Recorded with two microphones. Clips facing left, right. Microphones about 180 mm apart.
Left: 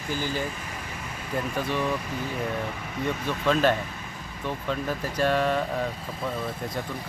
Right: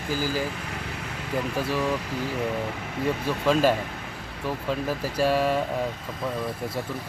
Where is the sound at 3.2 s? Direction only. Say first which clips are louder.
Right 1 dB; 5° right (ahead or behind).